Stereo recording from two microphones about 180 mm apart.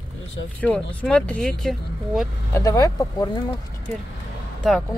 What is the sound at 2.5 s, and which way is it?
Speech, 20° left (ahead or behind).